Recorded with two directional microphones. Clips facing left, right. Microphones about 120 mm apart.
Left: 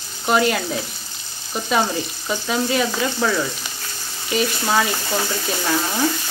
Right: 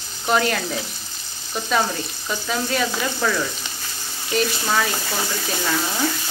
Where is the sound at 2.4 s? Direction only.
10° left (ahead or behind).